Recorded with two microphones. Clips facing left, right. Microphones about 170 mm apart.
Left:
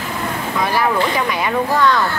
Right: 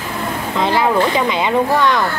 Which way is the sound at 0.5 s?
20° right (ahead or behind).